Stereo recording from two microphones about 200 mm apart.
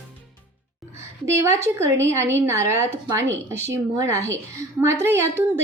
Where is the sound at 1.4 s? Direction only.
15° right (ahead or behind).